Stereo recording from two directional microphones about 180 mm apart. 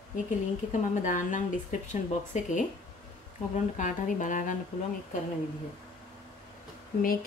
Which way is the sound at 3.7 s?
45° left (ahead or behind).